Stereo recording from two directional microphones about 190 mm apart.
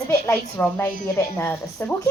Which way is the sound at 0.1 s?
15° left (ahead or behind).